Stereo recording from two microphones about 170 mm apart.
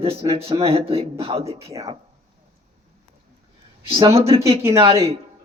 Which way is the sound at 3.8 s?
30° right (ahead or behind).